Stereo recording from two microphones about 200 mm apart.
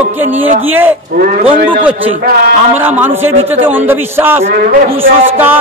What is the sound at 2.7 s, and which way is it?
A man's voice, 10° right (ahead or behind).